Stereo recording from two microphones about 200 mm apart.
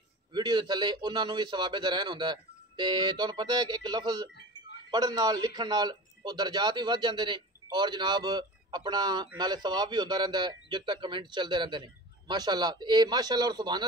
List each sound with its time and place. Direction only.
0.3 s a man's voice: 20° right (ahead or behind)